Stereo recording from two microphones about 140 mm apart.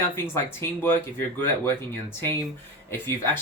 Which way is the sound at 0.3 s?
15° left (ahead or behind).